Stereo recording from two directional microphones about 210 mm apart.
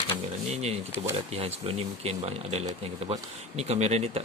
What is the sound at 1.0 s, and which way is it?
Speech, 25° right (ahead or behind).